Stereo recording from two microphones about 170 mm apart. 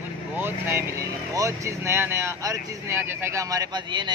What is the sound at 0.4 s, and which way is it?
A man's voice, 10° right (ahead or behind).